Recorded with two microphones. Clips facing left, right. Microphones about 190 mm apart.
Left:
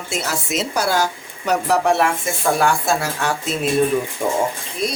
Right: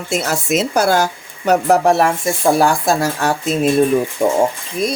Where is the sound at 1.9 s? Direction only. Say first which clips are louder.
Right 3 dB; 35° right (ahead or behind).